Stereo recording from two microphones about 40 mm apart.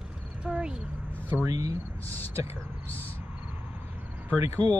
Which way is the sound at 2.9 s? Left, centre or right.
Left.